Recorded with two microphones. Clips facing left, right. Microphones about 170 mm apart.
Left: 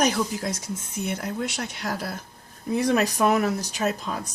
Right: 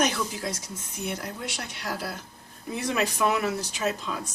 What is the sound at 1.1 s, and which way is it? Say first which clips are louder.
Speech: left 7 dB; 50° left (ahead or behind).